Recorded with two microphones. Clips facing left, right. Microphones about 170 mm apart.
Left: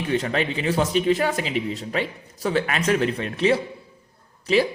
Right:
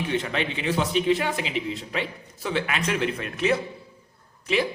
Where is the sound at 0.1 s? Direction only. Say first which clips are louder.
Left 3 dB; 40° left (ahead or behind).